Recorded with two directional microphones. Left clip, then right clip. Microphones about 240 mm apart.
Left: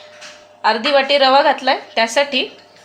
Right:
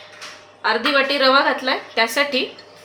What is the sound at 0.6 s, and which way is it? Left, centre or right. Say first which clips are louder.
Speech: left 3 dB; left.